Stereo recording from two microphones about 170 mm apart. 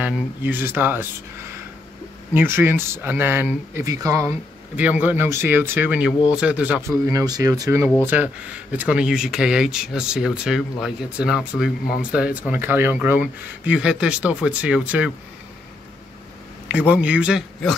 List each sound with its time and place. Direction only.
0.0 s speech: 10° right (ahead or behind)
2.3 s speech: 15° right (ahead or behind)
6.9 s speech: 20° right (ahead or behind)
16.7 s speech: 10° right (ahead or behind)